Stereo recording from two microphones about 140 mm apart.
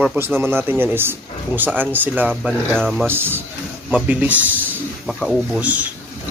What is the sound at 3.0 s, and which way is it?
Speech, 15° right (ahead or behind).